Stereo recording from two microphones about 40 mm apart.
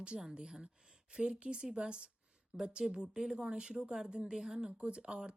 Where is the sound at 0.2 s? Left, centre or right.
Centre.